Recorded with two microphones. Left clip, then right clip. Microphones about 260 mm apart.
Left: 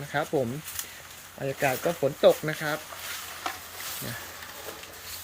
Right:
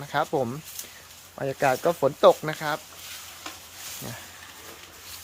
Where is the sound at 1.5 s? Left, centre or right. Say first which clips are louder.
Right 4 dB; centre.